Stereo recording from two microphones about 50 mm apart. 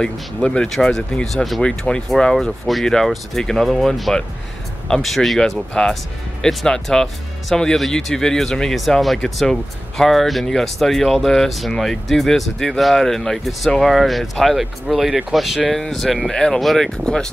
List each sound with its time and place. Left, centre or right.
0.0 s speech: centre
0.9 s speech: centre
1.6 s speech: centre
16.3 s speech: centre